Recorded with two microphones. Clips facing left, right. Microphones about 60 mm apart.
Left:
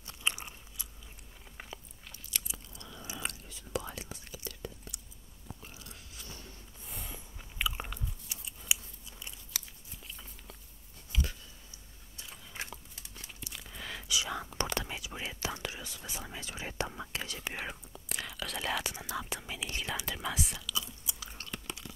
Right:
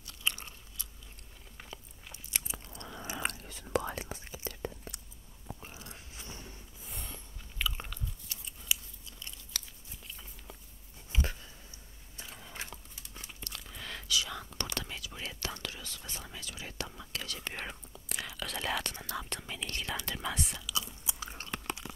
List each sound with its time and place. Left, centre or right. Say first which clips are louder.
0.0 s crunch: left 1 dB; centre
1.6 s biting: left 2 dB; centre
2.4 s whispering: right 3 dB; right
4.2 s whispering: right 3 dB; right
5.5 s biting: right 3 dB; right
6.8 s snort: left 1 dB; centre
7.3 s biting: left 2 dB; centre
11.1 s a sound: right 2 dB; right
13.4 s a sound: left 1 dB; centre
14.0 s whispering: even; centre
17.4 s speech: left 1 dB; centre
20.6 s chewing: right 1 dB; right